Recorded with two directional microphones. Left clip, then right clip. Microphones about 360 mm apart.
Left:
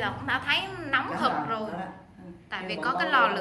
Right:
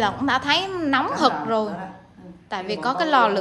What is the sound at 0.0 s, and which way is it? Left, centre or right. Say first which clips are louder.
A woman's voice: right 7 dB; centre.